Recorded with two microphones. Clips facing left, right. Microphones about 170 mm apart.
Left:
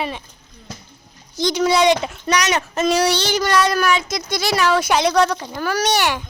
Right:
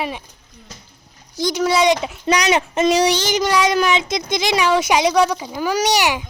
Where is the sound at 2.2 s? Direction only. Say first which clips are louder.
Right 5 dB; 25° right (ahead or behind).